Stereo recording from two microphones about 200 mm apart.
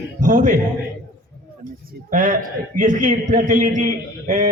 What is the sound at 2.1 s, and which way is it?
A man's voice, 40° right (ahead or behind).